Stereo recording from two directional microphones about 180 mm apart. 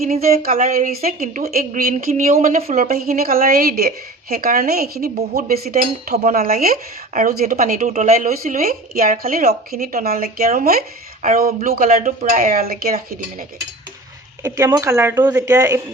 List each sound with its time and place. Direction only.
0.4 s speech: 50° right (ahead or behind)
14.4 s speech: 15° right (ahead or behind)